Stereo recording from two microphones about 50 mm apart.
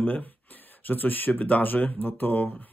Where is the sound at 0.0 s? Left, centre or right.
Left.